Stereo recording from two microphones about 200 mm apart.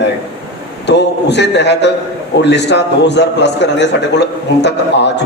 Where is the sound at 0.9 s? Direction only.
60° left (ahead or behind).